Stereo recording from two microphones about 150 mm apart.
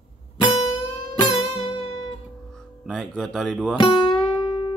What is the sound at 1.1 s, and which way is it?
Music, 30° left (ahead or behind).